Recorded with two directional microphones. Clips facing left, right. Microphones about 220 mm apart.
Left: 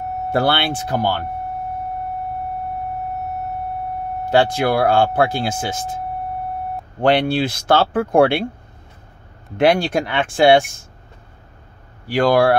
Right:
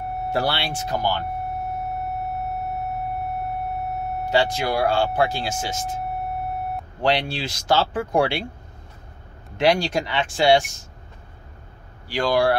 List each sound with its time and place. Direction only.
0.3 s speech: 55° left (ahead or behind)
4.3 s speech: 55° left (ahead or behind)
7.0 s speech: 55° left (ahead or behind)
9.6 s speech: 55° left (ahead or behind)
12.1 s speech: 60° left (ahead or behind)